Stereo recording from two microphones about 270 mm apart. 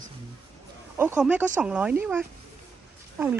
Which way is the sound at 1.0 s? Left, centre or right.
Centre.